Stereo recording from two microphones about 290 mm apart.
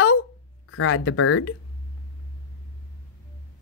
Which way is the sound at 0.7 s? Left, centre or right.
Left.